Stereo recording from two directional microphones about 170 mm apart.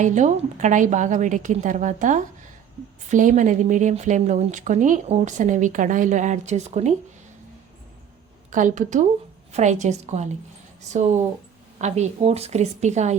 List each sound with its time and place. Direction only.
0.0 s speech: 45° right (ahead or behind)
8.5 s a woman's voice: 45° right (ahead or behind)
11.8 s a woman's voice: 40° right (ahead or behind)